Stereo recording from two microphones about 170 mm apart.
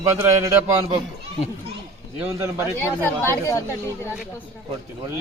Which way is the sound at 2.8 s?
10° left (ahead or behind).